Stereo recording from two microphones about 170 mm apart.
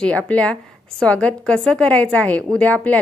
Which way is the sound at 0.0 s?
10° left (ahead or behind).